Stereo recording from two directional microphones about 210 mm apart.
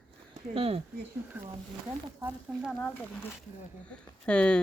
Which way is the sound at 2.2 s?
5° right (ahead or behind).